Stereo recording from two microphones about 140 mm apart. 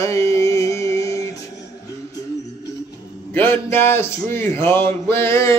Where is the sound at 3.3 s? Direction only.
15° left (ahead or behind).